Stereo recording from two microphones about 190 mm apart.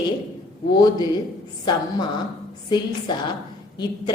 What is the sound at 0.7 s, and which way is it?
Speech, 20° left (ahead or behind).